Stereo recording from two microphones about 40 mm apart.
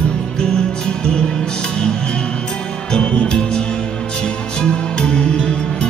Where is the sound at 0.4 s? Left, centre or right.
Left.